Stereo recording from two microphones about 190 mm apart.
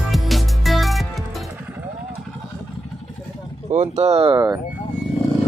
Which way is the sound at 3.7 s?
35° right (ahead or behind).